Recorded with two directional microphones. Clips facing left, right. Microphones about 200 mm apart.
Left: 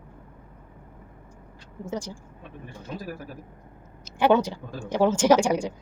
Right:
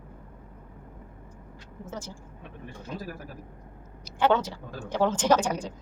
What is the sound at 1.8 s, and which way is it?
Speech, 15° left (ahead or behind).